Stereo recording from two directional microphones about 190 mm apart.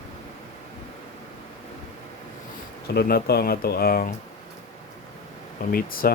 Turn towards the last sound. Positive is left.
turn(degrees=50)  # may be behind; listen again after turning